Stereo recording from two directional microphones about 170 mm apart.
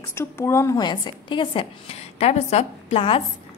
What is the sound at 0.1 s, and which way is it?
A woman's voice, 15° left (ahead or behind).